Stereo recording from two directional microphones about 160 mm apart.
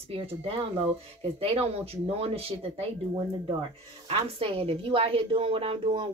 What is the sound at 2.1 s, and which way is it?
Speech, 35° right (ahead or behind).